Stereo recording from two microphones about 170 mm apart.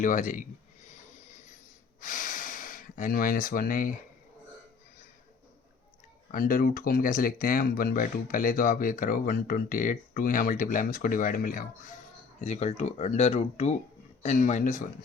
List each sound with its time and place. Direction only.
0.0 s speech: 50° left (ahead or behind)
2.0 s gasp: 50° left (ahead or behind)
6.3 s speech: 55° left (ahead or behind)
12.4 s speech: 40° left (ahead or behind)